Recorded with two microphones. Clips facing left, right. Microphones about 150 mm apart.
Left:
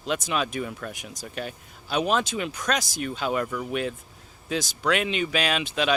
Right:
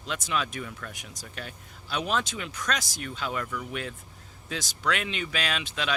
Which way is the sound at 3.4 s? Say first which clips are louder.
Left 5 dB; 35° left (ahead or behind).